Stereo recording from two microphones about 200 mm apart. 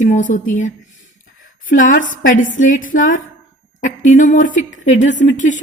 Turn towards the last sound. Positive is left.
turn(degrees=40)  # may be behind; listen again after turning